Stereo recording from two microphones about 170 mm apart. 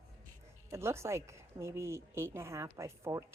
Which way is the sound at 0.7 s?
15° right (ahead or behind).